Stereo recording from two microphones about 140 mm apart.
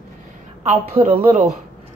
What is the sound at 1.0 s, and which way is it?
Speech, 45° right (ahead or behind).